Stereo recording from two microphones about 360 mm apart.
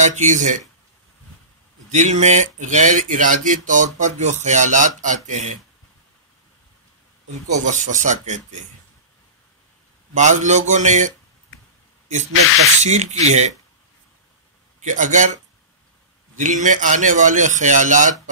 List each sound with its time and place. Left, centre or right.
0.0 s speech: centre
1.9 s speech: centre
7.6 s speech: centre
10.1 s speech: centre
12.8 s speech: centre
14.8 s speech: right
16.3 s speech: centre